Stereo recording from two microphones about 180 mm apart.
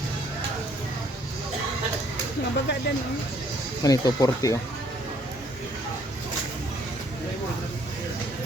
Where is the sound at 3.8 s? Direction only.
20° left (ahead or behind).